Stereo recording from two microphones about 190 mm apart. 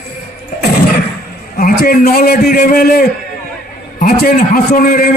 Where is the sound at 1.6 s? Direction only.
50° left (ahead or behind).